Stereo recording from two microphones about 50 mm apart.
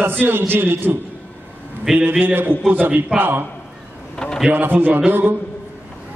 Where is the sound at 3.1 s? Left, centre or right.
Right.